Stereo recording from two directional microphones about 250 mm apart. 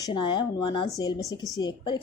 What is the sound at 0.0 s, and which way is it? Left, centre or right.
A woman's voice, centre.